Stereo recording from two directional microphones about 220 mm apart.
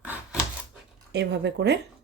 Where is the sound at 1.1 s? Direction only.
50° right (ahead or behind).